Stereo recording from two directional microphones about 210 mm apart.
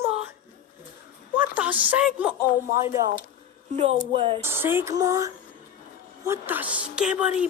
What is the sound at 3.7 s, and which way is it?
Speech, 25° right (ahead or behind).